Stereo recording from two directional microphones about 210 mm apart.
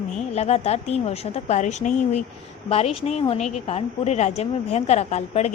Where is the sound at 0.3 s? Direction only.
30° left (ahead or behind).